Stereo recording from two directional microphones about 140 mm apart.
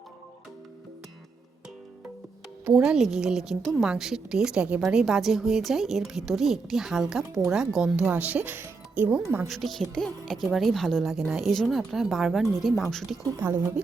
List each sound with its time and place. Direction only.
2.8 s speech: 5° right (ahead or behind)
9.5 s speech: centre (ahead or behind)
13.4 s speech: 15° right (ahead or behind)